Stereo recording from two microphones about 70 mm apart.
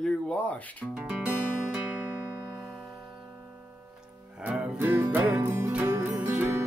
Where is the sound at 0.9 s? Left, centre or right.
Centre.